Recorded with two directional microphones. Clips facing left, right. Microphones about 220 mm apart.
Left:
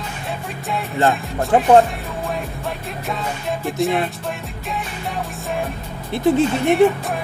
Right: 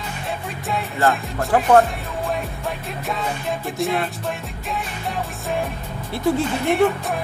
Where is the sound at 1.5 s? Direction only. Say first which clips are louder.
Left 2 dB; 15° left (ahead or behind).